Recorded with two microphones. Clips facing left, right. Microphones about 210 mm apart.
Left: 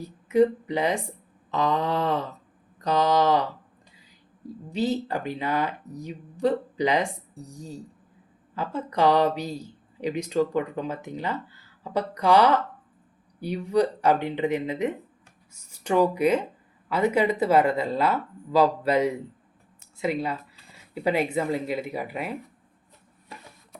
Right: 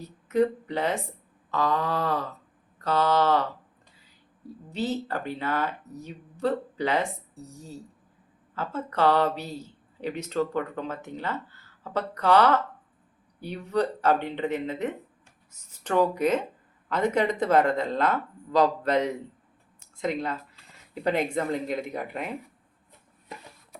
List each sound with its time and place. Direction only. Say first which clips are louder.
0.0 s speech: left 3 dB; 10° left (ahead or behind)
1.5 s a sound: left 2 dB; 20° left (ahead or behind)
2.8 s speech: left 2 dB; 15° left (ahead or behind)
4.7 s speech: left 3 dB; 15° left (ahead or behind)